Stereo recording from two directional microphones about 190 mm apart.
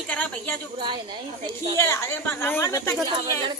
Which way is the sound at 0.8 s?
25° right (ahead or behind).